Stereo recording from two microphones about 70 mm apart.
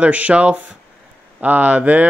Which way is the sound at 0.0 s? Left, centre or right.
Centre.